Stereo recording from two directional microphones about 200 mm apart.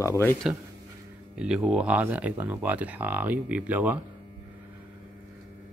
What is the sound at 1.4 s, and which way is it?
Speech, 5° right (ahead or behind).